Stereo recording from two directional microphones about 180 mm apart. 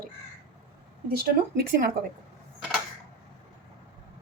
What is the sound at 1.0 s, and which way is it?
Speech, 60° right (ahead or behind).